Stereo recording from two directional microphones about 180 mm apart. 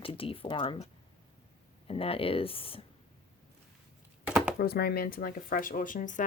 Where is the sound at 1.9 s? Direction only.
30° left (ahead or behind).